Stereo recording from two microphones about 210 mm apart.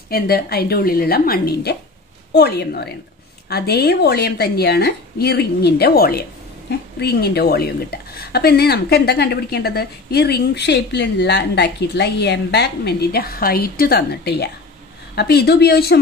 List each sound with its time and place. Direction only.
0.1 s a woman's voice: 50° left (ahead or behind)